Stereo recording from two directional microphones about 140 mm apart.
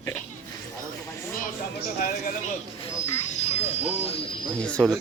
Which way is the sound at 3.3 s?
50° left (ahead or behind).